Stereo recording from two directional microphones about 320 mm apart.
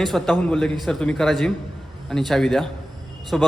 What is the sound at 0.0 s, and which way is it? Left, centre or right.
A man's voice, centre.